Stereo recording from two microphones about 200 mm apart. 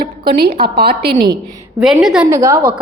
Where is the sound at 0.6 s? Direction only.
50° right (ahead or behind).